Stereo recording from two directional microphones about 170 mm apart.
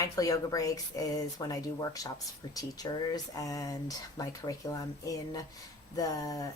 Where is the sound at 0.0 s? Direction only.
20° left (ahead or behind).